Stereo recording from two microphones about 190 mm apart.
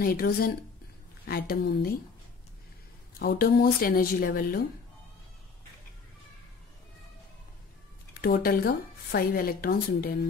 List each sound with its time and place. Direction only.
0.0 s speech: 50° left (ahead or behind)
3.2 s speech: 50° left (ahead or behind)
8.2 s speech: 50° left (ahead or behind)